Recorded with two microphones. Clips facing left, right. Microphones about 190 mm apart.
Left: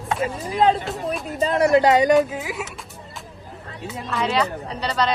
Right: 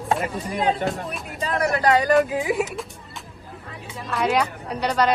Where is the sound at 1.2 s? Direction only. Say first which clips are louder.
Left 5 dB; 30° left (ahead or behind).